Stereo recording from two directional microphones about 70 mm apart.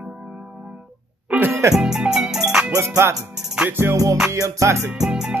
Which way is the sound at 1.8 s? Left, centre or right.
Centre.